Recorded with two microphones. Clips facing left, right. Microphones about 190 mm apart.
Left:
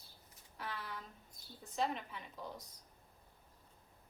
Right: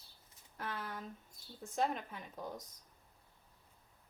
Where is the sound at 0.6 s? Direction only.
45° right (ahead or behind).